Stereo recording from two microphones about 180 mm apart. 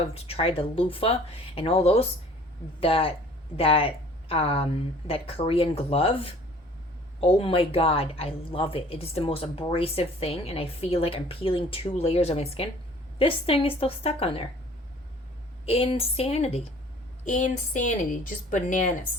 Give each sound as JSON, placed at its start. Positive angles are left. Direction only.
{"t": 0.1, "sound": "a woman's voice", "side_deg": 35}
{"t": 15.6, "sound": "a woman's voice", "side_deg": 35}